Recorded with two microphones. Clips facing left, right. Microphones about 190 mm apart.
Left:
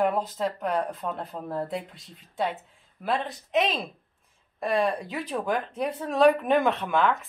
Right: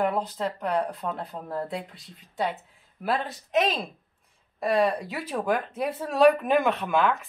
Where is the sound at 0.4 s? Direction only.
Centre (ahead or behind).